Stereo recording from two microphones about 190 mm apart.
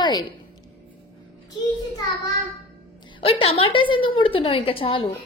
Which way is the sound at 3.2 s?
30° left (ahead or behind).